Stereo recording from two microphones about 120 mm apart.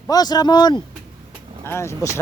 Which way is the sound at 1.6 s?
25° left (ahead or behind).